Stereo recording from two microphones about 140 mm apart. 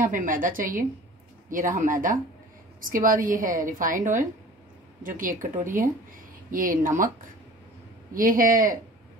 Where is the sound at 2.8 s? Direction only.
80° right.